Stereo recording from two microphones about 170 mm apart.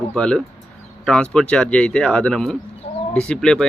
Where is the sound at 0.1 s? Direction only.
5° left (ahead or behind).